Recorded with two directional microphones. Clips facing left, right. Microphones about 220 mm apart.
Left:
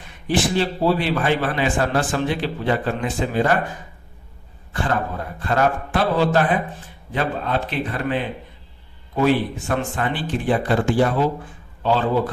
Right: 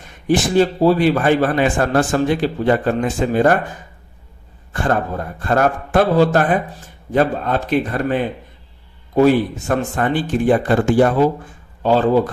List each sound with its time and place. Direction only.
0.3 s speech: 45° right (ahead or behind)
4.7 s a man's voice: 50° right (ahead or behind)